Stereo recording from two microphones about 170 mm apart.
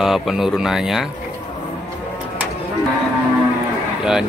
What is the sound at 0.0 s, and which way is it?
Speech, centre (ahead or behind).